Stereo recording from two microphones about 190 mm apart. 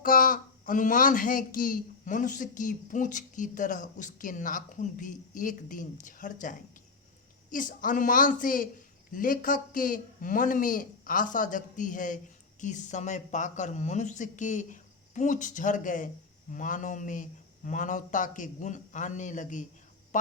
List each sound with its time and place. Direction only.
0.0 s speech: 45° left (ahead or behind)